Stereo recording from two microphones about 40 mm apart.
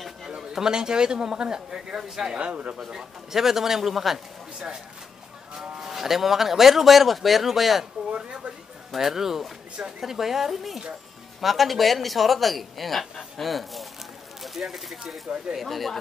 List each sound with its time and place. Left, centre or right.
0.4 s speech: centre
2.0 s speech: centre
2.3 s speech: right
2.9 s speech: centre
5.6 s speech: centre
8.1 s speech: right
8.9 s speech: centre